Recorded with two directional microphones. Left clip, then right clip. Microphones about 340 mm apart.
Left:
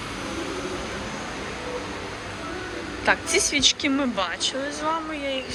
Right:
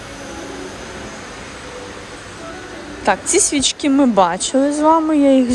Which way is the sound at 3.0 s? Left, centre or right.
Centre.